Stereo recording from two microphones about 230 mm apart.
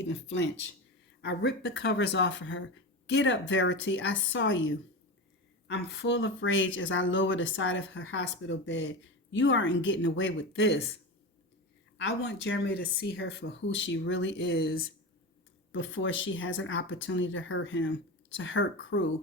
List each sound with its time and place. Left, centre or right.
0.0 s speech: left
11.9 s speech: left
15.7 s speech: left